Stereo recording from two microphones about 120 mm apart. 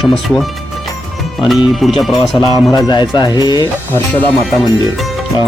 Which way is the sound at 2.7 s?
35° left (ahead or behind).